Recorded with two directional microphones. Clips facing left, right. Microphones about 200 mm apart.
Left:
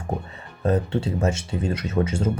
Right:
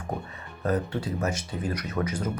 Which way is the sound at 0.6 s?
25° left (ahead or behind).